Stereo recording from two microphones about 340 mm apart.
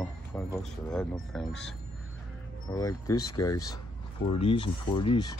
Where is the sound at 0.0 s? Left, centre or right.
Centre.